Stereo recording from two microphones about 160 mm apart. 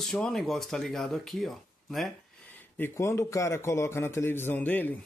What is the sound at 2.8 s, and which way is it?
A man's voice, 15° left (ahead or behind).